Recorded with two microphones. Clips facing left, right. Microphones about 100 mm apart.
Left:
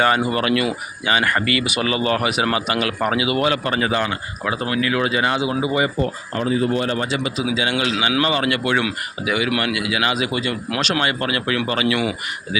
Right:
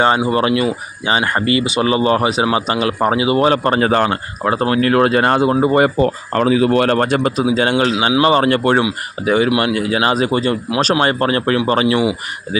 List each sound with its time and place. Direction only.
0.3 s speech: 25° right (ahead or behind); by 5.9 s 50° right (ahead or behind)
6.0 s speech: 85° right; by 11.9 s 35° right (ahead or behind)